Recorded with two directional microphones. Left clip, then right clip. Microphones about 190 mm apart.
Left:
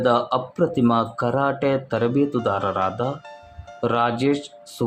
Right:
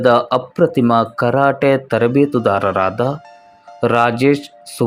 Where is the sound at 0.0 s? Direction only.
20° right (ahead or behind).